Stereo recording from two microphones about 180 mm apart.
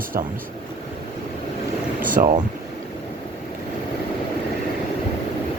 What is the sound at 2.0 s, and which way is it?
Vehicle, 50° right (ahead or behind).